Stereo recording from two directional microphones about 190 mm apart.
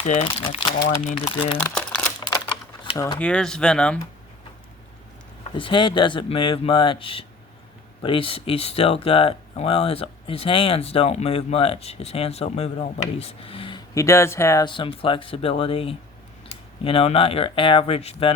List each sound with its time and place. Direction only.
0.0 s speech: 35° left (ahead or behind)
1.7 s crumpling: 5° left (ahead or behind)
3.2 s speech: 5° left (ahead or behind)
5.4 s speech: 25° left (ahead or behind)